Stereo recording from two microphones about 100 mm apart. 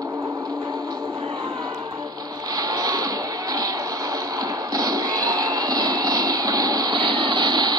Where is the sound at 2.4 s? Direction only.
40° right (ahead or behind).